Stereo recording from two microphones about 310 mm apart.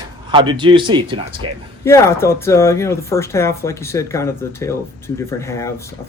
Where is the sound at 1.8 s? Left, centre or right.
Centre.